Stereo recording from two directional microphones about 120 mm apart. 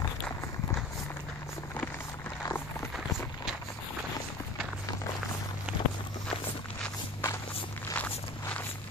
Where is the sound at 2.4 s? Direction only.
20° left (ahead or behind).